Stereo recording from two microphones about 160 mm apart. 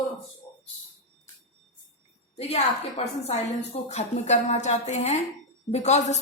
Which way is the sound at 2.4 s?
40° left (ahead or behind).